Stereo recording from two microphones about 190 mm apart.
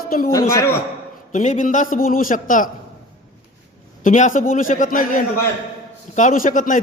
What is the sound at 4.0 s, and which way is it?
A man's voice, 40° left (ahead or behind).